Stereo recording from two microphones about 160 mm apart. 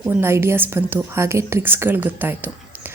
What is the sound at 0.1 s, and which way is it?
A woman's voice, 15° right (ahead or behind).